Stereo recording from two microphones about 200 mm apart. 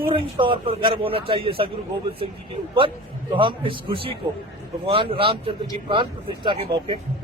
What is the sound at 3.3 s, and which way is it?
Speech, 25° right (ahead or behind).